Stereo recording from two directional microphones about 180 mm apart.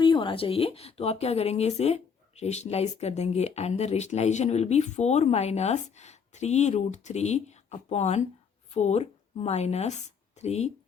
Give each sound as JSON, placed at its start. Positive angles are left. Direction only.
{"t": 0.0, "sound": "a woman's voice", "side_deg": 30}